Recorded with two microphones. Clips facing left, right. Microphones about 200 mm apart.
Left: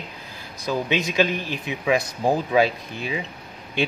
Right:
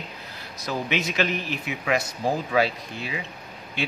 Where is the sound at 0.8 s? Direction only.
15° left (ahead or behind).